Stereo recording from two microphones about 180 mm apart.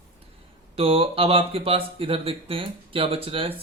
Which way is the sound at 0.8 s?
30° right (ahead or behind).